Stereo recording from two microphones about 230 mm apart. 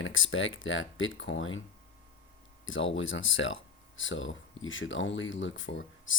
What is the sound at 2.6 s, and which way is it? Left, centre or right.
Speech, left.